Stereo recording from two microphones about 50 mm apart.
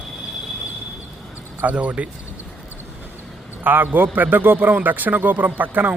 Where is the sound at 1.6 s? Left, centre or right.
Right.